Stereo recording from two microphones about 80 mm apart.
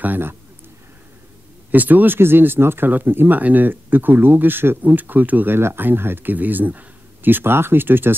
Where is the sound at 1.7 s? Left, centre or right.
Right.